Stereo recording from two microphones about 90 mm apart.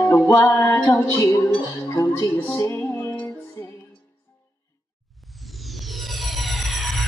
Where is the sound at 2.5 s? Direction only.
30° left (ahead or behind).